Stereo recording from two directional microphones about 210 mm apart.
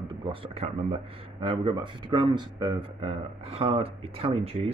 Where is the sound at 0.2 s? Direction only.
25° right (ahead or behind).